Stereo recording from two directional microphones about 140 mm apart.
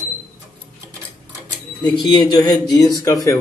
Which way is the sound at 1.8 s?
30° left (ahead or behind).